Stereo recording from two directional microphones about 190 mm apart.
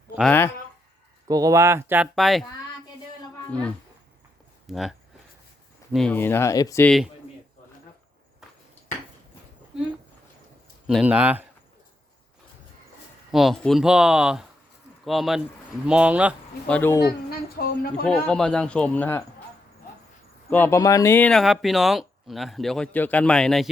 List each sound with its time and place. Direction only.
0.2 s speech: 10° left (ahead or behind)
1.3 s speech: 20° right (ahead or behind)
2.1 s speech: centre (ahead or behind)
4.6 s speech: centre (ahead or behind); by 6.8 s 15° left (ahead or behind)
6.8 s speech: centre (ahead or behind)
10.8 s speech: 5° right (ahead or behind)
13.3 s speech: centre (ahead or behind)
16.6 s speech: 10° left (ahead or behind)
17.2 s speech: 50° left (ahead or behind)
18.0 s speech: 5° left (ahead or behind)
20.5 s speech: 10° left (ahead or behind)